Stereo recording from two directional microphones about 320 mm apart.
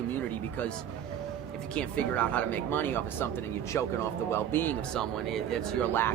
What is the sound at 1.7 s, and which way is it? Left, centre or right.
Speech, centre.